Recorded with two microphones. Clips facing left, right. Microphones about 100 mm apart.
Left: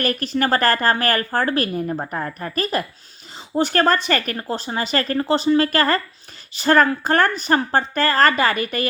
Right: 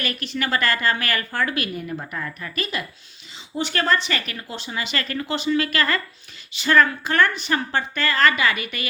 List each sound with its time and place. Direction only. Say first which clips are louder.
0.0 s speech: left 6 dB; 40° left (ahead or behind)